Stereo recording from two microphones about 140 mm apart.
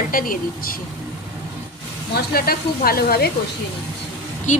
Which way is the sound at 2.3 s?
90° left.